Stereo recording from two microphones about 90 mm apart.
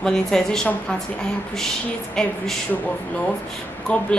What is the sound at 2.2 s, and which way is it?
Speech, 5° left (ahead or behind).